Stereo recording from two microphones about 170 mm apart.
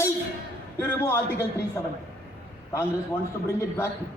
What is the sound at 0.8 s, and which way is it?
Speech, 15° left (ahead or behind).